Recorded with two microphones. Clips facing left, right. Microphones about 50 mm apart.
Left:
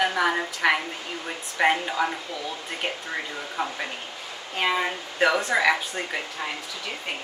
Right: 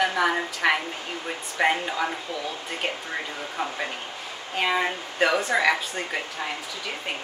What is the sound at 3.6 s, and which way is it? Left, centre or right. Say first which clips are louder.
A woman's voice: even; centre.